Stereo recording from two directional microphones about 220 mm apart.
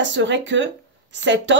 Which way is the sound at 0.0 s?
55° right (ahead or behind).